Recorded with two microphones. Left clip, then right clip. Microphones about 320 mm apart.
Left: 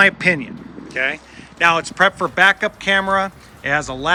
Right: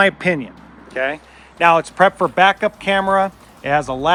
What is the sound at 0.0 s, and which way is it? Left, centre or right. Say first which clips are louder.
Speech: left 2 dB; centre.